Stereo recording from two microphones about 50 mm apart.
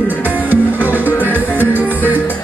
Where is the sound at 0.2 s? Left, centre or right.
Right.